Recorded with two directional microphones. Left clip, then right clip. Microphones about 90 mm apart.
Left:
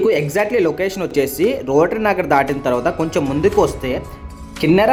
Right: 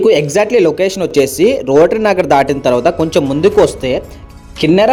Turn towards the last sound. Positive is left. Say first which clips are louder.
# right 4 dB
turn(degrees=-50)  # may be behind; listen again after turning